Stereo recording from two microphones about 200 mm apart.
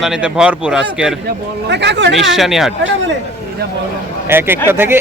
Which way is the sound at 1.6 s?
60° right (ahead or behind).